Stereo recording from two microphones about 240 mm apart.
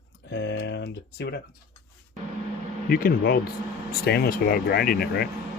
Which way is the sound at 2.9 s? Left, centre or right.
Left.